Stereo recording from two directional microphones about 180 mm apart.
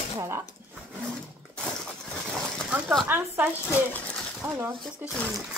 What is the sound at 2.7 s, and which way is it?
Speech, 5° right (ahead or behind).